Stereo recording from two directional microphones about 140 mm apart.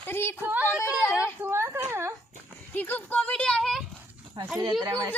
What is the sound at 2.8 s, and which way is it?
Speech, 10° left (ahead or behind).